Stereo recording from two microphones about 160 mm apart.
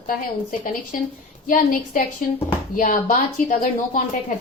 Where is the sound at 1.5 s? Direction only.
55° left (ahead or behind).